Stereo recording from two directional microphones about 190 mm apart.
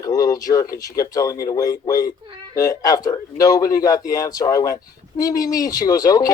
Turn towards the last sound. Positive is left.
turn(degrees=20)  # may be behind; listen again after turning